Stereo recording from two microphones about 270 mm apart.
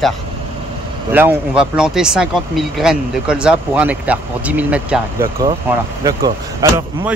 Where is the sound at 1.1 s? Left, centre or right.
Centre.